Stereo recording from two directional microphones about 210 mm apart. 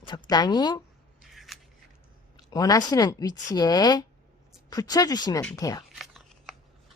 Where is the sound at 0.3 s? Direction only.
20° left (ahead or behind).